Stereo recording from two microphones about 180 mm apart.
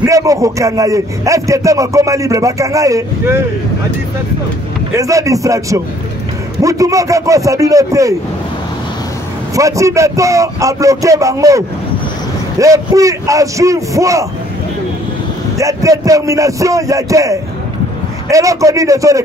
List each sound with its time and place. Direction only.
0.0 s a man's voice: 20° right (ahead or behind)
4.9 s a man's voice: 15° right (ahead or behind)
9.6 s a man's voice: 15° right (ahead or behind)
15.5 s a man's voice: 20° right (ahead or behind)